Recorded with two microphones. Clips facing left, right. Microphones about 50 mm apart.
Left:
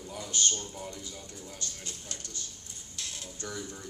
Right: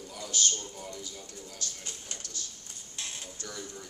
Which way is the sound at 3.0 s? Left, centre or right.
Right.